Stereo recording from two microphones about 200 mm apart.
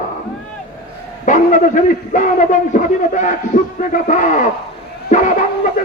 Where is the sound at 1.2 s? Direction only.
40° left (ahead or behind).